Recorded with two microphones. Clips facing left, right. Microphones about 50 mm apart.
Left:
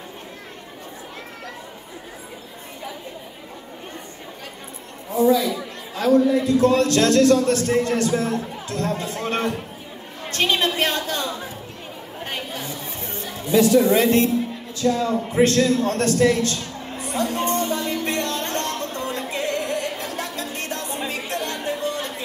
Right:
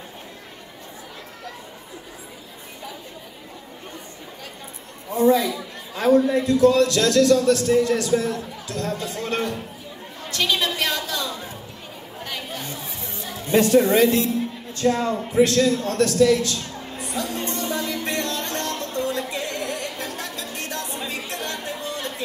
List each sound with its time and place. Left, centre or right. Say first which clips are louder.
5.1 s a sound: even; right
5.9 s a man's voice: even; right
6.6 s speech: right 3 dB; left
10.3 s a sound: left 2 dB; left
12.2 s chatter: left 2 dB; left
13.5 s speech: left 1 dB; right
13.9 s speech: even; left
14.8 s speech: even; right
15.3 s speech: even; left
17.0 s music: left 5 dB; left
21.5 s a sound: left 4 dB; left